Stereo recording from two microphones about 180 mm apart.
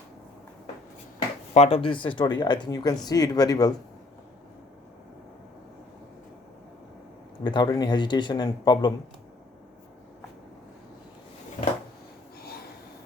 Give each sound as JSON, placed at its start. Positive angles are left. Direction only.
{"t": 1.5, "sound": "speech", "side_deg": 35}
{"t": 7.4, "sound": "speech", "side_deg": 25}